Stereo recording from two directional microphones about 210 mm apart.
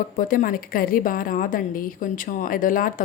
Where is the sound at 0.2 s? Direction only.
40° left (ahead or behind).